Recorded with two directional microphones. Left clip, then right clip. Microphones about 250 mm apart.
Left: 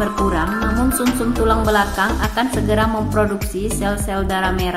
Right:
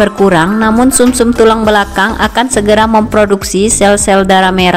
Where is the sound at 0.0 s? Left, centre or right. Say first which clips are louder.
Right 11 dB; right.